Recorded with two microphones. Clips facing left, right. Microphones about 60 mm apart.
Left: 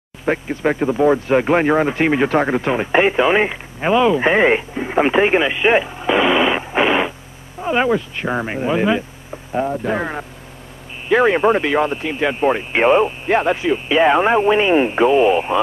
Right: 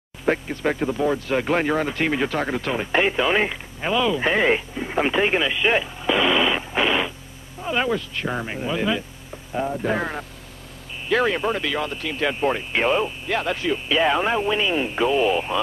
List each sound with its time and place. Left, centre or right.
0.2 s speech: centre
11.1 s speech: left